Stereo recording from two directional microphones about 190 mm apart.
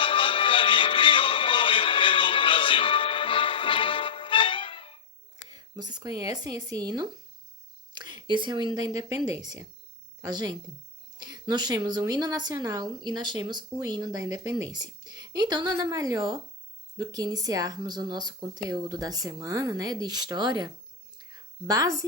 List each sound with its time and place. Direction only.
0.0 s music: 25° left (ahead or behind)
5.5 s a woman's voice: 20° right (ahead or behind)
21.2 s a sound: 20° right (ahead or behind)